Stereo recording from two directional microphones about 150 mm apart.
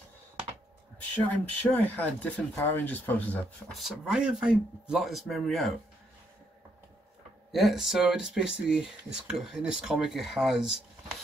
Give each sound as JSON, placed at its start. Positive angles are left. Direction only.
{"t": 1.3, "sound": "speech", "side_deg": 10}
{"t": 7.5, "sound": "speech", "side_deg": 0}